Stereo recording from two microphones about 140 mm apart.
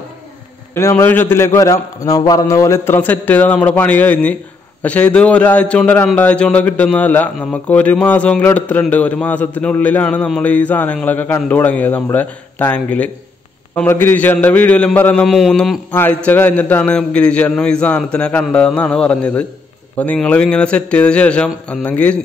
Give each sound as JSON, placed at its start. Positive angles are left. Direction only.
{"t": 0.7, "sound": "a man's voice", "side_deg": 20}
{"t": 15.9, "sound": "a man's voice", "side_deg": 10}